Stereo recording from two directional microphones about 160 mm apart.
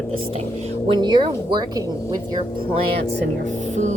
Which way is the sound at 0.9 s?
30° right (ahead or behind).